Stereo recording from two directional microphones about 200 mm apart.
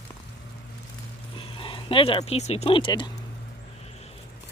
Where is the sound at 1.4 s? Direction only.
25° left (ahead or behind).